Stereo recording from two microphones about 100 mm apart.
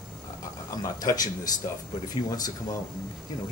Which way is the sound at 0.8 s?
40° left (ahead or behind).